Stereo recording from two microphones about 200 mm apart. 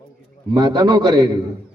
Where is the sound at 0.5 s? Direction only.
20° right (ahead or behind).